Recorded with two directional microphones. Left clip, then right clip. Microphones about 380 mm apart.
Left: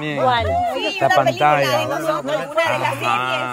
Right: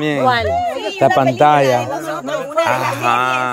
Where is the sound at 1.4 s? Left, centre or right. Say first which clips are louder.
Right 4 dB; centre.